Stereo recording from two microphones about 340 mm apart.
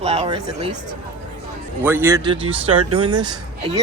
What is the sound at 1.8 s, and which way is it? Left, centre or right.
Speech, centre.